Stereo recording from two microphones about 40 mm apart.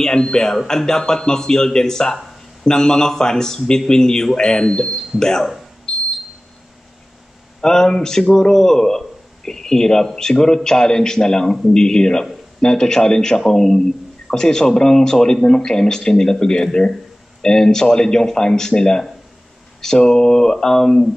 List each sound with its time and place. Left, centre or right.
0.0 s a man's voice: centre
7.6 s a man's voice: centre
20.1 s a man's voice: centre